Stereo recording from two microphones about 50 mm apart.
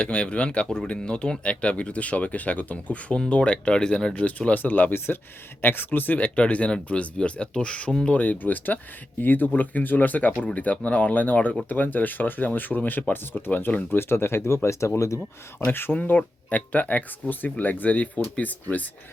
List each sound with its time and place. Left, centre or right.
0.0 s speech: left
4.1 s speech: left
6.1 s speech: left
8.1 s speech: left
15.7 s speech: left
16.0 s speech: left